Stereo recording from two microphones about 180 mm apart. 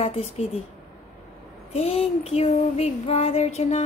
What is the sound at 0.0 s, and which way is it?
Female singing, 35° left (ahead or behind).